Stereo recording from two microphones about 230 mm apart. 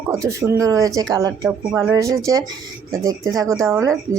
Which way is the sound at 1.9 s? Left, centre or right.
Centre.